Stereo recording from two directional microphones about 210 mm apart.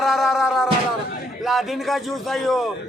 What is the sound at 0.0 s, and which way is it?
Music, centre (ahead or behind).